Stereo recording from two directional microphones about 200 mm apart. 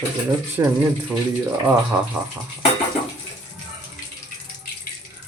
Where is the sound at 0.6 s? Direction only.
15° right (ahead or behind).